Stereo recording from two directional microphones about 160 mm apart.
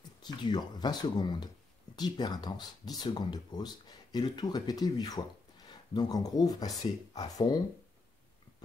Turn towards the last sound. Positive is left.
turn(degrees=25)  # may be behind; listen again after turning